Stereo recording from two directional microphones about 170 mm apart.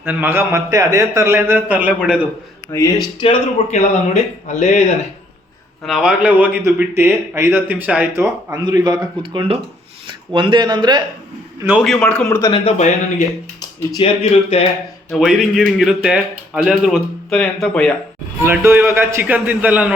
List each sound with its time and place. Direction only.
0.0 s a man's voice: 10° right (ahead or behind)
2.7 s speech: 20° left (ahead or behind)
3.2 s a man's voice: 35° left (ahead or behind)
5.8 s a man's voice: 5° right (ahead or behind)
8.6 s speech: 25° right (ahead or behind)
11.8 s a man's voice: 5° left (ahead or behind)
12.6 s a man's voice: 45° left (ahead or behind)
15.1 s a man's voice: centre (ahead or behind)
18.4 s a man's voice: 15° right (ahead or behind)